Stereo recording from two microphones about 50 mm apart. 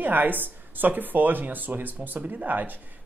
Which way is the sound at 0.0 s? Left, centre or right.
Right.